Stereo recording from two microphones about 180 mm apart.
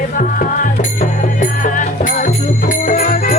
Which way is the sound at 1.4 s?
45° left (ahead or behind).